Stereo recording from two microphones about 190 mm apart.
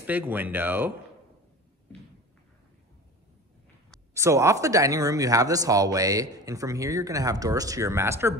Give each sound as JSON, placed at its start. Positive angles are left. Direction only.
{"t": 0.0, "sound": "speech", "side_deg": -10}
{"t": 4.1, "sound": "speech", "side_deg": -15}